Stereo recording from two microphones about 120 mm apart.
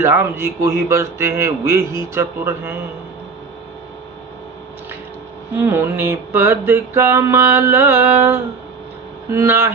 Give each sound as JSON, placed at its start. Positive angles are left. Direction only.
{"t": 0.0, "sound": "music", "side_deg": -20}
{"t": 5.5, "sound": "music", "side_deg": -20}